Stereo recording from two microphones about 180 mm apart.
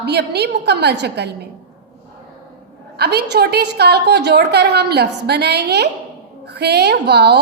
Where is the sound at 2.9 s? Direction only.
65° right (ahead or behind).